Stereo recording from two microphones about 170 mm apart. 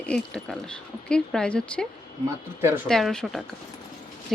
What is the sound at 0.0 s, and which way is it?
Speech, 5° left (ahead or behind).